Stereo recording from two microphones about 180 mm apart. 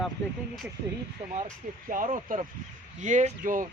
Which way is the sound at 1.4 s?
45° right (ahead or behind).